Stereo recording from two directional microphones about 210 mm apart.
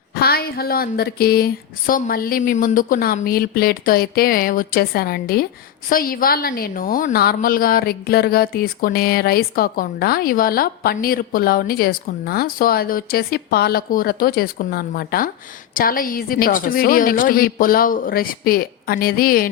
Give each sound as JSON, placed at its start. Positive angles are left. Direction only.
{"t": 0.1, "sound": "a woman's voice", "side_deg": 45}